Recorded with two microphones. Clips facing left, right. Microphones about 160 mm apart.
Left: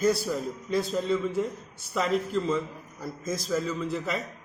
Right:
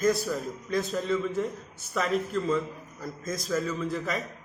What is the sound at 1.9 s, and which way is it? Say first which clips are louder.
A man's voice: left 1 dB; centre (ahead or behind).